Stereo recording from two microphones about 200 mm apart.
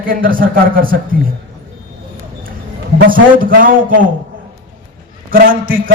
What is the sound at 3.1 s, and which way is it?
Speech, 45° right (ahead or behind).